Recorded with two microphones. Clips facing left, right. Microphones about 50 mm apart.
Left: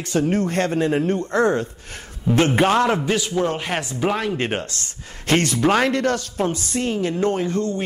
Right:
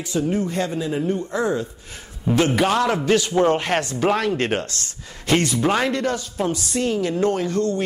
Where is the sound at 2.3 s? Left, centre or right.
Left.